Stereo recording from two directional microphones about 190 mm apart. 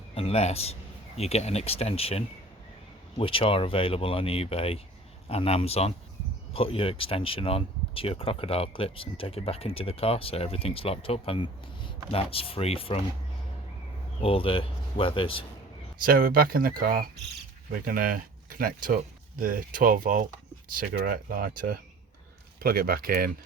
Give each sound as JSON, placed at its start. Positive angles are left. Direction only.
{"t": 0.1, "sound": "speech", "side_deg": 35}
{"t": 14.2, "sound": "speech", "side_deg": 30}
{"t": 16.0, "sound": "speech", "side_deg": -50}